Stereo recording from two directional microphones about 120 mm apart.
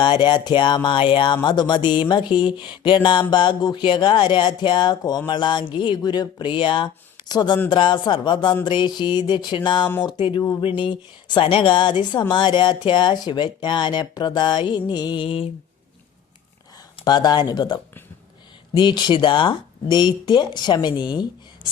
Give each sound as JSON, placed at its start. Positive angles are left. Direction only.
{"t": 0.0, "sound": "a woman's voice", "side_deg": 40}
{"t": 17.0, "sound": "speech", "side_deg": 35}